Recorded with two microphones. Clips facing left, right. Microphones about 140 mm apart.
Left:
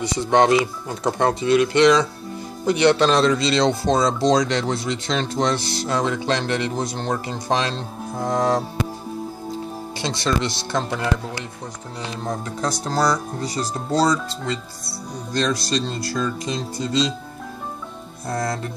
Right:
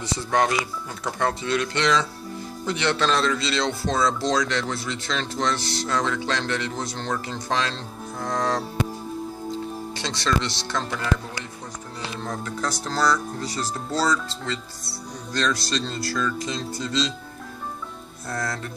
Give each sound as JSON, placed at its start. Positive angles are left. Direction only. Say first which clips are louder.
{"t": 0.0, "sound": "speech", "louder": "left 6 dB", "side_deg": 15}
{"t": 9.9, "sound": "speech", "louder": "left 3 dB", "side_deg": 10}
{"t": 12.3, "sound": "speech", "louder": "left 4 dB", "side_deg": 30}
{"t": 12.6, "sound": "speech", "louder": "left 3 dB", "side_deg": 15}
{"t": 18.4, "sound": "speech", "louder": "left 4 dB", "side_deg": 20}